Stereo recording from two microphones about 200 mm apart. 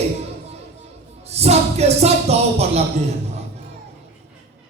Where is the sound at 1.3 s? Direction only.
30° right (ahead or behind).